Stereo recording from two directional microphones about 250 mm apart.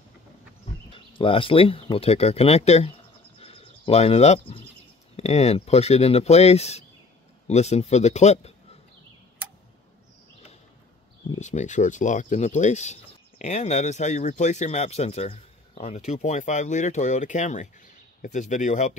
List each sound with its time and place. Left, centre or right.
0.9 s speech: left
3.3 s a sound: left
5.1 s speech: left
11.3 s speech: left